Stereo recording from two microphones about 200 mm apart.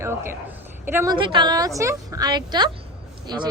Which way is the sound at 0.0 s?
10° right (ahead or behind).